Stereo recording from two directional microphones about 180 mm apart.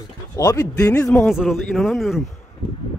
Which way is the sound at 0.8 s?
10° left (ahead or behind).